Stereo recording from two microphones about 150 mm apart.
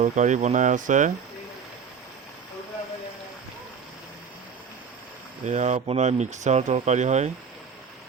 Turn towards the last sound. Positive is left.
turn(degrees=-50)  # may be behind; listen again after turning